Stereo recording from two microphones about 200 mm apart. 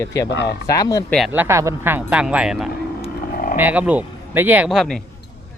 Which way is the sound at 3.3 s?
45° left (ahead or behind).